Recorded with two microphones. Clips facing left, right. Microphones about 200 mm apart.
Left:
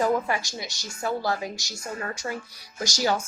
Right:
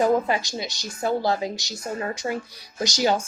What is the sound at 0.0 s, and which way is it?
A woman's voice, 20° right (ahead or behind).